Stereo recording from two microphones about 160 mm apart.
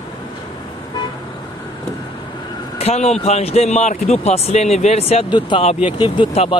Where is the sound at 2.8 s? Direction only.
45° left (ahead or behind).